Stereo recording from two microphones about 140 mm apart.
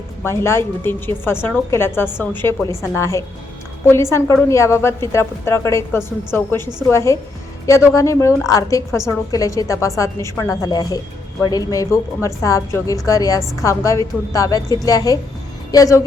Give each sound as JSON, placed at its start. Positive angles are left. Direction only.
{"t": 0.2, "sound": "a woman's voice", "side_deg": 20}